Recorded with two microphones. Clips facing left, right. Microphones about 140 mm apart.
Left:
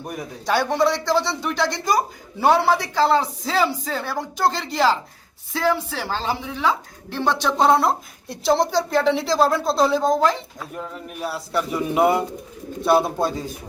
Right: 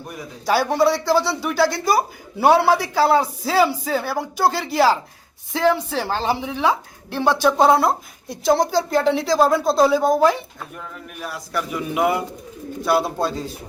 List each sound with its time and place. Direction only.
0.4 s a woman's voice: 5° right (ahead or behind)
10.8 s bird: 30° left (ahead or behind)
12.8 s speech: 25° left (ahead or behind)